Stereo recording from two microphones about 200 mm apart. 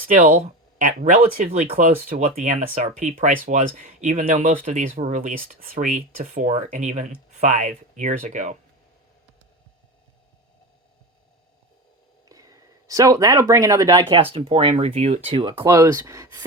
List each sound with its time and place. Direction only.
0.8 s speech: 40° right (ahead or behind)
12.3 s speech: 15° right (ahead or behind)